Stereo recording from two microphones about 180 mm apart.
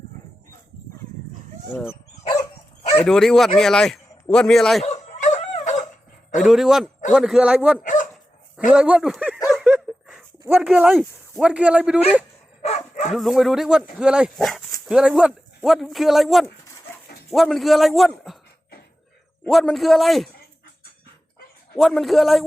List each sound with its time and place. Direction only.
1.9 s dog: 20° left (ahead or behind)
3.0 s a man's voice: centre (ahead or behind)
4.8 s dog: 40° left (ahead or behind)
6.4 s speech: centre (ahead or behind)
9.5 s a sound: 5° right (ahead or behind)
10.4 s speech: 10° right (ahead or behind)
12.6 s dog: 35° left (ahead or behind)
13.1 s speech: centre (ahead or behind)
19.5 s speech: centre (ahead or behind)
21.8 s speech: centre (ahead or behind)